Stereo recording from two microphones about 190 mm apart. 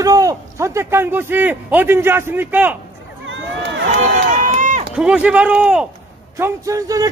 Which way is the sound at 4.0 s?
40° right (ahead or behind).